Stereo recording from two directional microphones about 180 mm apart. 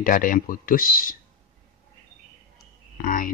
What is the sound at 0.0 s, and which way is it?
Speech, 50° left (ahead or behind).